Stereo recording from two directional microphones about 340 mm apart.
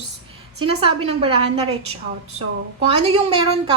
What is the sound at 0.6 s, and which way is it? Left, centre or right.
Speech, centre.